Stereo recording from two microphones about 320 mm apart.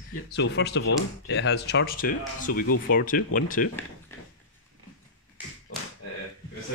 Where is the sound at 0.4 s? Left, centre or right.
Left.